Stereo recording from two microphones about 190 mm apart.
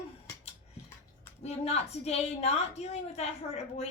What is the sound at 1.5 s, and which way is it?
A woman's voice, 35° left (ahead or behind).